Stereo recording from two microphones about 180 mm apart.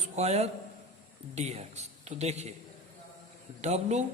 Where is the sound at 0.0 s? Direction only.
35° right (ahead or behind).